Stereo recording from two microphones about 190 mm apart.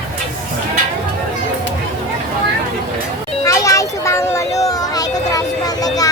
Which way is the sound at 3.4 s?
15° left (ahead or behind).